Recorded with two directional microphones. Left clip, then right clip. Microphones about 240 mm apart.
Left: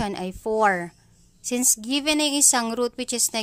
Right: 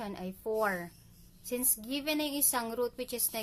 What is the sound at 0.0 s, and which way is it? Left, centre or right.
A woman's voice, left.